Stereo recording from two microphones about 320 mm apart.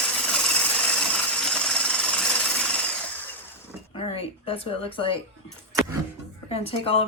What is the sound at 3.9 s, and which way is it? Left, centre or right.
A woman's voice, centre.